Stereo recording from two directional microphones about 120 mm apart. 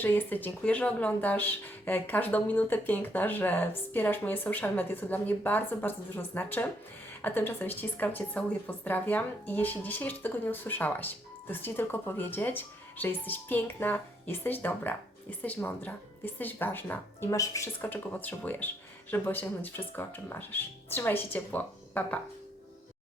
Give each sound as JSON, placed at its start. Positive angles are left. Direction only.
{"t": 0.0, "sound": "a woman's voice", "side_deg": 15}
{"t": 17.7, "sound": "a woman's voice", "side_deg": 15}